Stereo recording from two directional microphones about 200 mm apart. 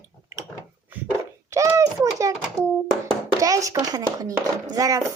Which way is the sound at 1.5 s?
15° right (ahead or behind).